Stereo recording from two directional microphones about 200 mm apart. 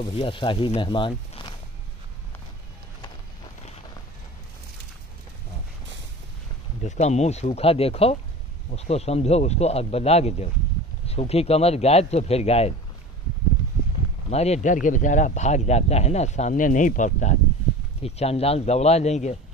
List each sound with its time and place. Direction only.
0.0 s speech: 25° left (ahead or behind)
6.8 s a man's voice: 35° left (ahead or behind)
14.3 s a man's voice: 35° left (ahead or behind)